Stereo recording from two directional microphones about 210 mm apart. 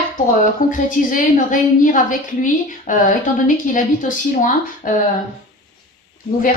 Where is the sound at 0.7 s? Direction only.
40° left (ahead or behind).